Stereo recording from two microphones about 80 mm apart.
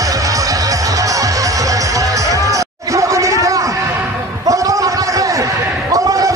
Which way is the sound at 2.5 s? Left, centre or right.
Right.